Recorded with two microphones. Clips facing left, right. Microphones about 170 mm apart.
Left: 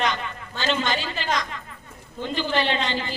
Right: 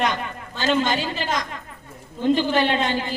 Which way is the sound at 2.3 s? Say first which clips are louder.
Right 4 dB; 50° right (ahead or behind).